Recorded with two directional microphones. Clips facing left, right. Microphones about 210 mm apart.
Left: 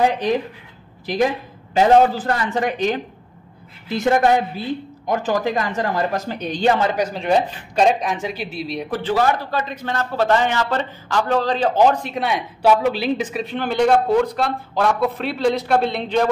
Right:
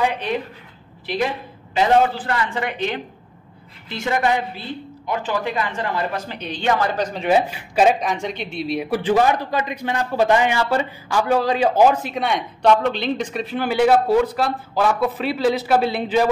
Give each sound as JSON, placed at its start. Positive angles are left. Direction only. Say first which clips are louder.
{"t": 2.1, "sound": "a woman's voice", "louder": "left 2 dB", "side_deg": 40}
{"t": 6.7, "sound": "a man's voice", "louder": "even", "side_deg": 25}
{"t": 7.0, "sound": "a man's voice", "louder": "left 2 dB", "side_deg": 5}
{"t": 7.2, "sound": "a man's voice", "louder": "right 2 dB", "side_deg": -5}
{"t": 9.0, "sound": "a man's voice", "louder": "right 1 dB", "side_deg": -15}